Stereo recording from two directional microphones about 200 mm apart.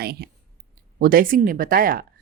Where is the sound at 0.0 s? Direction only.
50° right (ahead or behind).